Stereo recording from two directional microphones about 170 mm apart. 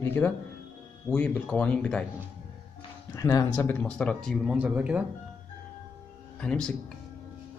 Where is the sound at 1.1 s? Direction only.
10° left (ahead or behind).